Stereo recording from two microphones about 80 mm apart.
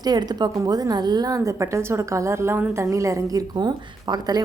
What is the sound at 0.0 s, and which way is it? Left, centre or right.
A woman's voice, right.